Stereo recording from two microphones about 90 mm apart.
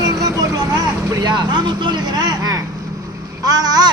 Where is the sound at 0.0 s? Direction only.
45° right (ahead or behind).